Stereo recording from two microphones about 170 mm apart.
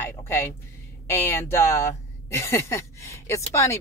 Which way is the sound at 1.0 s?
15° left (ahead or behind).